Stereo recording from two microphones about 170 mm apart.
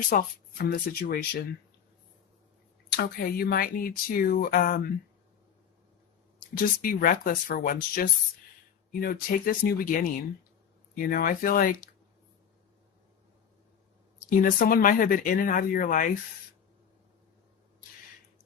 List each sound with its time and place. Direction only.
0.1 s speech: 60° left (ahead or behind)
2.9 s speech: 65° left (ahead or behind)
6.6 s speech: 55° left (ahead or behind)
14.3 s speech: 55° left (ahead or behind)